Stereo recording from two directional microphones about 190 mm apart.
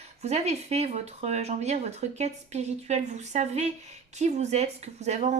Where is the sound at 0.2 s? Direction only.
35° right (ahead or behind).